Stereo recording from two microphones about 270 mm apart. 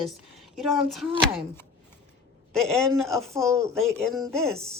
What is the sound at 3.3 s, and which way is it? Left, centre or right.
Speech, centre.